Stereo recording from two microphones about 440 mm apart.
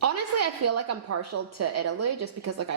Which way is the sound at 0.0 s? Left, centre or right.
Right.